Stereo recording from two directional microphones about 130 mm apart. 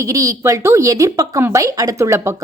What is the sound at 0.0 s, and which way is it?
Speech, 25° right (ahead or behind).